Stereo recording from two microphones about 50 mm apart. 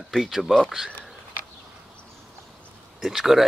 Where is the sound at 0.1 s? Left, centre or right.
Centre.